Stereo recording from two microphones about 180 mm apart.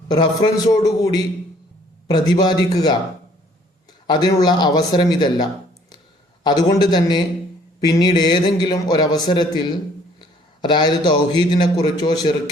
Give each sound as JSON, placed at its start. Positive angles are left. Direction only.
{"t": 0.1, "sound": "a man's voice", "side_deg": 25}
{"t": 4.0, "sound": "a man's voice", "side_deg": 25}